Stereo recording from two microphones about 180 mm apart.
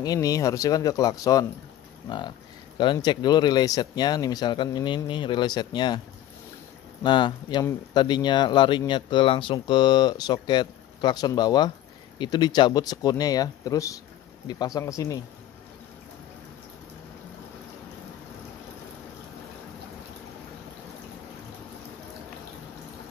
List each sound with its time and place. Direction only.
0.0 s speech: 20° left (ahead or behind)
7.0 s speech: 25° left (ahead or behind)